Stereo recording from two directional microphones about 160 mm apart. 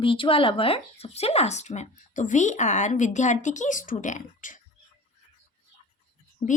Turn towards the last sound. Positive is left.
turn(degrees=45)  # may be behind; listen again after turning